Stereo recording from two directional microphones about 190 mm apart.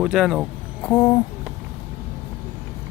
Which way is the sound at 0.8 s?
5° left (ahead or behind).